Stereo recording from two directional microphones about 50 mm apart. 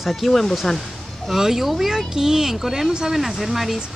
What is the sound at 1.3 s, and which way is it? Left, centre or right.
Speech, centre.